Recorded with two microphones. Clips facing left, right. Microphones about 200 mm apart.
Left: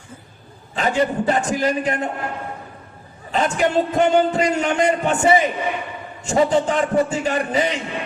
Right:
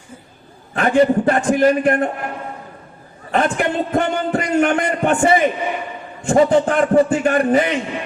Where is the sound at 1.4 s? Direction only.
55° right (ahead or behind).